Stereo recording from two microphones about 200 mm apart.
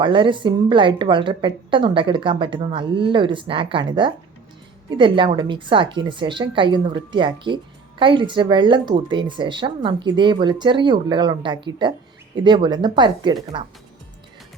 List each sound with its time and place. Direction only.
0.0 s a woman's voice: 25° right (ahead or behind)